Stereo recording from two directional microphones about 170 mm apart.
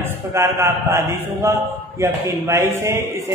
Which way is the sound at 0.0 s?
15° right (ahead or behind).